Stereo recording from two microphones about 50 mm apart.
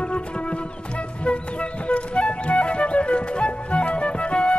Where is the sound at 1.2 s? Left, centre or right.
Left.